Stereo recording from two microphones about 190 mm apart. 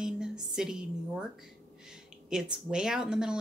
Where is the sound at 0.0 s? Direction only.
5° right (ahead or behind).